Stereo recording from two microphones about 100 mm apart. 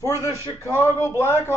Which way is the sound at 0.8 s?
25° left (ahead or behind).